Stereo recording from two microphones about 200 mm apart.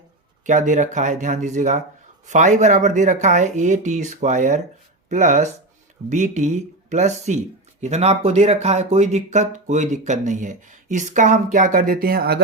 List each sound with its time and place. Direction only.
0.4 s speech: 40° right (ahead or behind)